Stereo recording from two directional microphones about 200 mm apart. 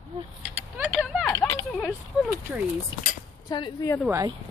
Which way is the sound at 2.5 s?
5° right (ahead or behind).